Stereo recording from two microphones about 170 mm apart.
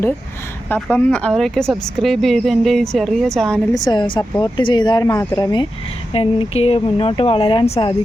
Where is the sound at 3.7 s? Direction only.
25° left (ahead or behind).